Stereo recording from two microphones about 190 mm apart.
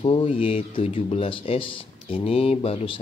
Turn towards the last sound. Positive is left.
turn(degrees=30)  # may be behind; listen again after turning